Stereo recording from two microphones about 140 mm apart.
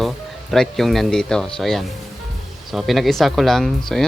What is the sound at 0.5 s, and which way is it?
Speech, centre (ahead or behind).